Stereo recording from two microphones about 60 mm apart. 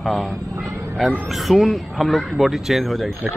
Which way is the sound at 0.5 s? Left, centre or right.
Right.